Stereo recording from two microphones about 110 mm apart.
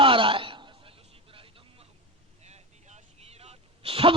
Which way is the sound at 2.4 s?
90° right.